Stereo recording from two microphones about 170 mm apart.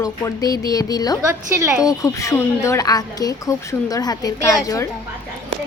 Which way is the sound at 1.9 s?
20° left (ahead or behind).